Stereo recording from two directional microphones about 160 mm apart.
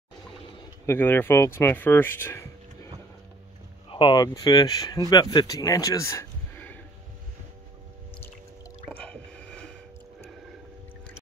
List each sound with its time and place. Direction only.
0.8 s speech: 15° left (ahead or behind)
3.9 s speech: 30° left (ahead or behind); by 6.8 s 10° left (ahead or behind)
9.0 s squish: 5° left (ahead or behind)